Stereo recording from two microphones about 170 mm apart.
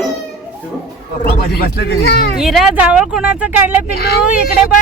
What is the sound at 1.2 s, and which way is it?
Speech, 65° left (ahead or behind).